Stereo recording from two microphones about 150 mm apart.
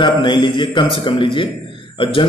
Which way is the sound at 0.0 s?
30° left (ahead or behind).